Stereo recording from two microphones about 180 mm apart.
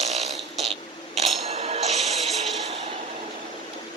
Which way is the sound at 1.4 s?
35° right (ahead or behind).